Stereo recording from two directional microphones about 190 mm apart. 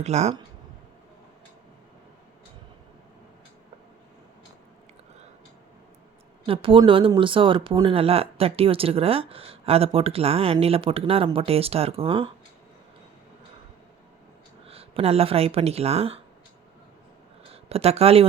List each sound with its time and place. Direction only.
0.0 s speech: 35° right (ahead or behind)
6.4 s speech: 30° right (ahead or behind)
14.7 s speech: 30° right (ahead or behind)
17.5 s speech: 30° right (ahead or behind)